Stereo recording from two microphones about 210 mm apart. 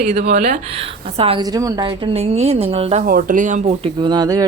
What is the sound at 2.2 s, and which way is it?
Speech, 30° right (ahead or behind).